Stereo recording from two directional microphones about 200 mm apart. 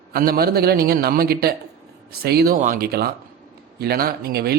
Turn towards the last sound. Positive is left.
turn(degrees=-50)  # may be behind; listen again after turning